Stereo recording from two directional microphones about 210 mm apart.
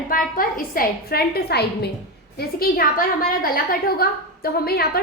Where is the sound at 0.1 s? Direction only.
40° left (ahead or behind).